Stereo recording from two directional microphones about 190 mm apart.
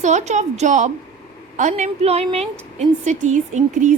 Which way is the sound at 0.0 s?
40° right (ahead or behind).